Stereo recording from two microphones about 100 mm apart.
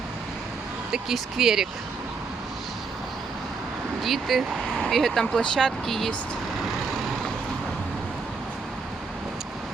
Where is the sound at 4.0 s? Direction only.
Centre (ahead or behind).